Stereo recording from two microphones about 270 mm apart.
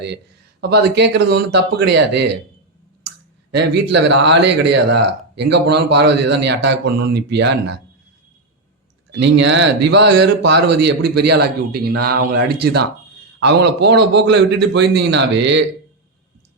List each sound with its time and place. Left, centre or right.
0.6 s speech: right
3.5 s speech: right
9.1 s speech: right